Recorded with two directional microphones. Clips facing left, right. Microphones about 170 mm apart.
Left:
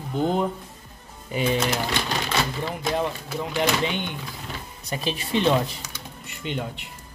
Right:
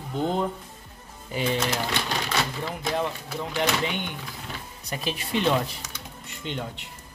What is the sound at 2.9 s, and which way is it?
Speech, 15° left (ahead or behind).